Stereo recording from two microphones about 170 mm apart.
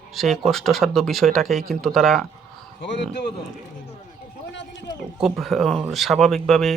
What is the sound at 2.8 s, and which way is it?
Speech, 85° left.